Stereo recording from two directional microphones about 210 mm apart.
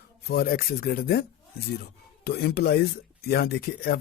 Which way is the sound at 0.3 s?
45° left (ahead or behind).